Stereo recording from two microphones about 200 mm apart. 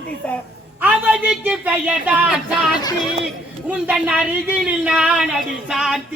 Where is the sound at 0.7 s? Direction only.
10° right (ahead or behind).